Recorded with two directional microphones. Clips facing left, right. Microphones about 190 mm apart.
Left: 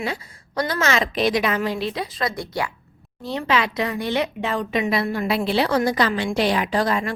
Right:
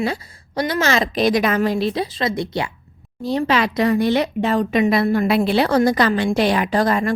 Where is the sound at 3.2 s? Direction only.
40° right (ahead or behind).